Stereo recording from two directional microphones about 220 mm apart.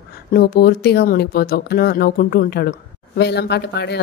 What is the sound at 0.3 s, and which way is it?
A woman's voice, 45° left (ahead or behind).